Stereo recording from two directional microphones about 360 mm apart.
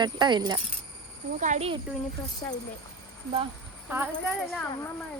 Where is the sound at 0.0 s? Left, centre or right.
Centre.